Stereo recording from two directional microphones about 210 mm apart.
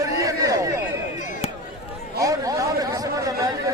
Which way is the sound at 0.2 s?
15° right (ahead or behind).